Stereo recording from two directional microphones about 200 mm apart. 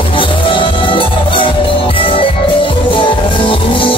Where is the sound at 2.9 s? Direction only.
25° left (ahead or behind).